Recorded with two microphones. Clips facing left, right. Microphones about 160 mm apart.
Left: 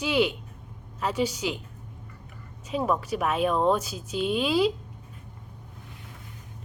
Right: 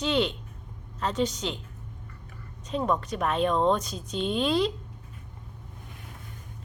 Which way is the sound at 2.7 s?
5° left (ahead or behind).